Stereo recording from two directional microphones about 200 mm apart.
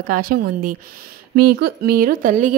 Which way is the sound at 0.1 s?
45° right (ahead or behind).